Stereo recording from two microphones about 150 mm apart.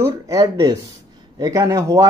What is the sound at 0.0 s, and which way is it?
Speech, 20° right (ahead or behind).